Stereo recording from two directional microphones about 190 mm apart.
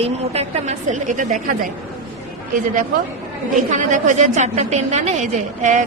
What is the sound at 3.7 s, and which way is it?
A woman's voice, 40° right (ahead or behind).